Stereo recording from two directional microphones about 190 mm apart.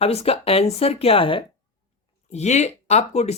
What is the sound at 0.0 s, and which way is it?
Speech, 30° left (ahead or behind).